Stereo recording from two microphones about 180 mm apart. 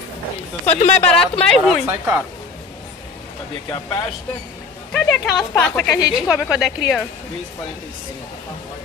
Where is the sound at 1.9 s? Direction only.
15° right (ahead or behind).